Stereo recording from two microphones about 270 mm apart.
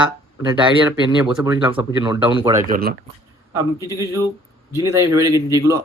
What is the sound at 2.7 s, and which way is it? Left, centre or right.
Speech, right.